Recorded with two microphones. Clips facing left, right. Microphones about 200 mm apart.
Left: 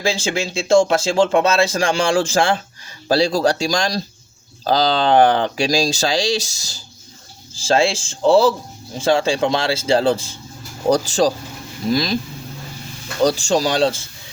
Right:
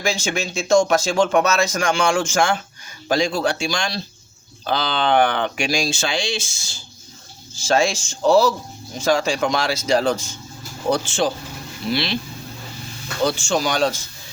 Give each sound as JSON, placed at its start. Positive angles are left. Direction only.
{"t": 0.0, "sound": "speech", "side_deg": 30}
{"t": 13.2, "sound": "speech", "side_deg": 35}